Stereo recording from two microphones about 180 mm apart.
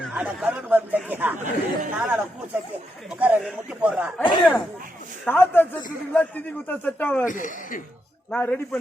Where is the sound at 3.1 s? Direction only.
10° right (ahead or behind).